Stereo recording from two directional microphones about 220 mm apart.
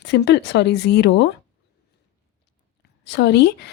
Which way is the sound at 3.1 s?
50° left (ahead or behind).